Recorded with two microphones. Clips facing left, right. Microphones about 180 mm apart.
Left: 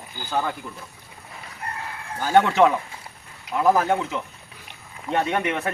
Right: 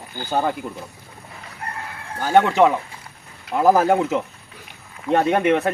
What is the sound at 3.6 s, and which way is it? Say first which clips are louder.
Speech: right 4 dB; 40° right (ahead or behind).